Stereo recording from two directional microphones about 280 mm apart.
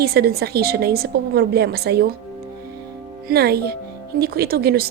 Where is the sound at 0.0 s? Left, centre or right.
Right.